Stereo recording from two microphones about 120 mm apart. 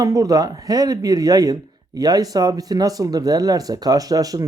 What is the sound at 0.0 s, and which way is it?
Speech, 30° right (ahead or behind).